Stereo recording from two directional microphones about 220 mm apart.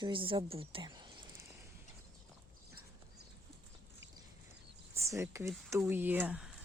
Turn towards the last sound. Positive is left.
turn(degrees=-5)  # may be behind; listen again after turning